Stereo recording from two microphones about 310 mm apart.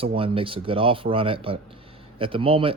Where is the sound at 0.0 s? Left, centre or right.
Centre.